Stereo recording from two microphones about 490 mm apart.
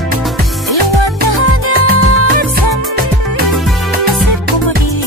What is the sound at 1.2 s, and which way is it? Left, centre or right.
Music, left.